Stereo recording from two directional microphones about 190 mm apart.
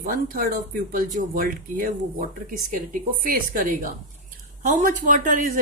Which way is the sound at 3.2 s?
45° right (ahead or behind).